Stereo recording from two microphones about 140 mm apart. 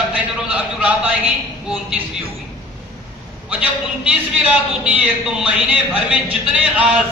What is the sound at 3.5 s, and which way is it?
A man's voice, 10° right (ahead or behind).